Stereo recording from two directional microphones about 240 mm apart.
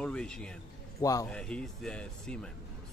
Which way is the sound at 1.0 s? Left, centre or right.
Centre.